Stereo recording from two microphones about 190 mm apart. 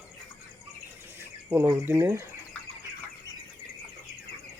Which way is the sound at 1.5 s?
10° right (ahead or behind).